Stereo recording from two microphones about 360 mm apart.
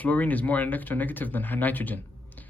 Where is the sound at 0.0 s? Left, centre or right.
Centre.